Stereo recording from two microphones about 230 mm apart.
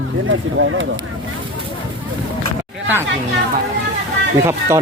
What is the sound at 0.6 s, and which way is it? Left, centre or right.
Speech, right.